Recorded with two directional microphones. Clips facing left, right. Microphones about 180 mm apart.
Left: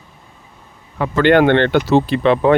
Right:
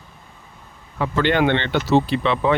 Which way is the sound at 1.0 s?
55° left (ahead or behind).